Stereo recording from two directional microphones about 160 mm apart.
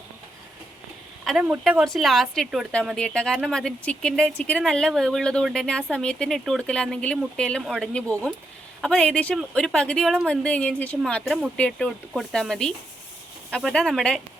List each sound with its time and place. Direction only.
1.2 s speech: centre (ahead or behind)